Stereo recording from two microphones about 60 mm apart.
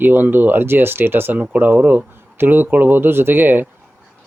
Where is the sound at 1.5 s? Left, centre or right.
Right.